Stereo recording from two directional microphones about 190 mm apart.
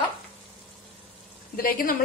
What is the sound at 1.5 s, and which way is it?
Speech, 50° left (ahead or behind).